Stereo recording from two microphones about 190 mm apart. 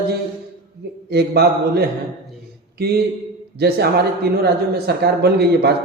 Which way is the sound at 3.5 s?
55° right (ahead or behind).